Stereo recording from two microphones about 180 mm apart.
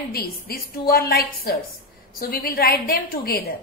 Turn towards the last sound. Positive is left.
turn(degrees=55)  # may be behind; listen again after turning